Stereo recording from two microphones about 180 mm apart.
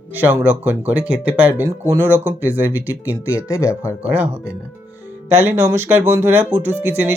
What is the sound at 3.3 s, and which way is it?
Speech, 15° left (ahead or behind).